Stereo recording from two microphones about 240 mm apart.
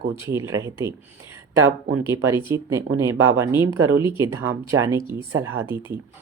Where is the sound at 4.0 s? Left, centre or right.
Centre.